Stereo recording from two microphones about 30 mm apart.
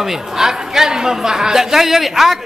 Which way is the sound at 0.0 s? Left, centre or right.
Centre.